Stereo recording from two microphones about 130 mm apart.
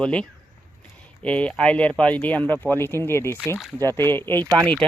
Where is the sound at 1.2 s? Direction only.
10° left (ahead or behind).